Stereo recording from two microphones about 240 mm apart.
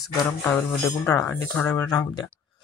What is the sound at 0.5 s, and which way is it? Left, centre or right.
Speech, centre.